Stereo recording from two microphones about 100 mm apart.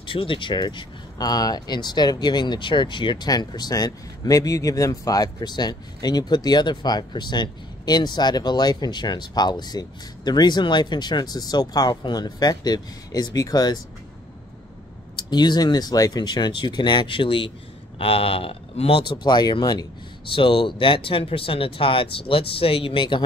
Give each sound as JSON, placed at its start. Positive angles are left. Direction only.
{"t": 0.0, "sound": "speech", "side_deg": 60}
{"t": 15.1, "sound": "speech", "side_deg": 45}
{"t": 17.9, "sound": "speech", "side_deg": 70}
{"t": 20.3, "sound": "speech", "side_deg": 60}